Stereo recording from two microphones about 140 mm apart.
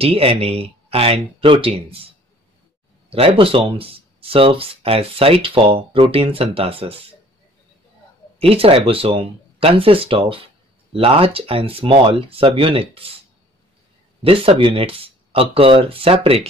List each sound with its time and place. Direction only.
0.0 s speech: 45° right (ahead or behind)
8.4 s speech: 45° right (ahead or behind)
14.2 s speech: 40° right (ahead or behind)